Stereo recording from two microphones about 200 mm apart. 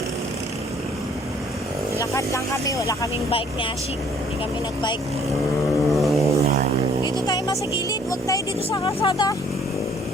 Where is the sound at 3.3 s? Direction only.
25° left (ahead or behind).